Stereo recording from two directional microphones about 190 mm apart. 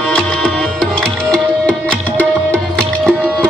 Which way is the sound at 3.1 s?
5° right (ahead or behind).